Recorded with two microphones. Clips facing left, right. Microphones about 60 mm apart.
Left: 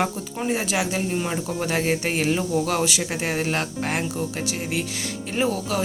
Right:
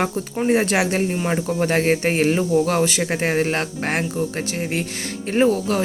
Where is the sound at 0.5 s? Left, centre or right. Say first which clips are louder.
Right 6 dB; right.